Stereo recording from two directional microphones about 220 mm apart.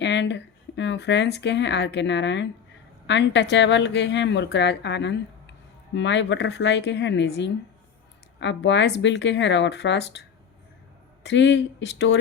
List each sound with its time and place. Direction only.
0.0 s speech: 55° left (ahead or behind)